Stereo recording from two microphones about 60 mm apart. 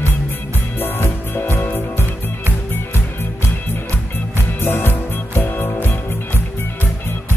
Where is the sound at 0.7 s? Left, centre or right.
Left.